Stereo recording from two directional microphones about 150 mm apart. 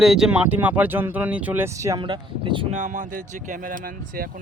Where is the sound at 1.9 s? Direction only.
35° right (ahead or behind).